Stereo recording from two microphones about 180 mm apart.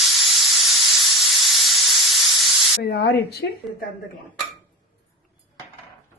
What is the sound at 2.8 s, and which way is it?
A woman's voice, 65° left (ahead or behind).